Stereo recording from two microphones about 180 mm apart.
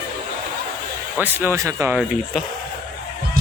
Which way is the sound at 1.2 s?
15° right (ahead or behind).